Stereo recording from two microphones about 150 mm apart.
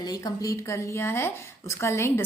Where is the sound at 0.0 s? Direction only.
25° left (ahead or behind).